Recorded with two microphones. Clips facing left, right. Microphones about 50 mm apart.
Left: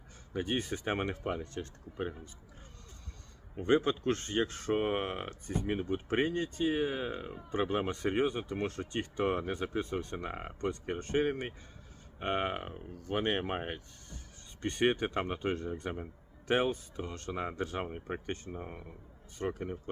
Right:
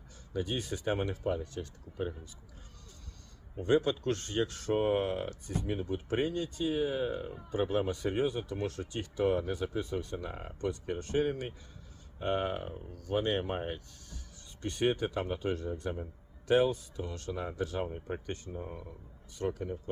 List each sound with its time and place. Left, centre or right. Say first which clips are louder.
0.3 s speech: left 1 dB; left
3.5 s speech: even; left
17.8 s speech: even; left